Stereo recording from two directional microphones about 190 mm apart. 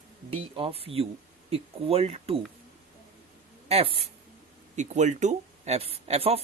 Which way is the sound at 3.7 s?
30° right (ahead or behind).